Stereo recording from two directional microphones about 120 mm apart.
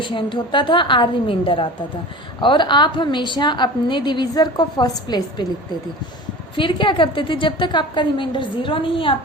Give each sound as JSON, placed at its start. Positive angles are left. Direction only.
{"t": 0.0, "sound": "a woman's voice", "side_deg": 45}
{"t": 6.6, "sound": "a woman's voice", "side_deg": 40}